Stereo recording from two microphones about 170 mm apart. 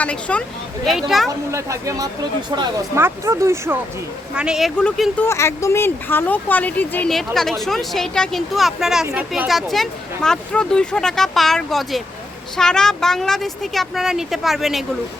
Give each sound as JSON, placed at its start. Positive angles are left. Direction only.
{"t": 0.0, "sound": "speech", "side_deg": 5}
{"t": 1.3, "sound": "speech", "side_deg": -15}
{"t": 4.4, "sound": "speech", "side_deg": -5}
{"t": 5.2, "sound": "speech", "side_deg": 15}